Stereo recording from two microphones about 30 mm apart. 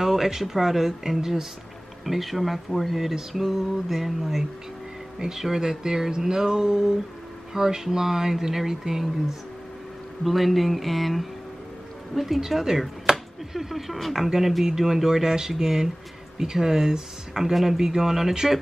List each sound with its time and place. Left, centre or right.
0.0 s speech: centre
10.2 s speech: centre
12.4 s speech: centre
13.1 s a sound: centre
13.9 s speech: centre
14.2 s speech: centre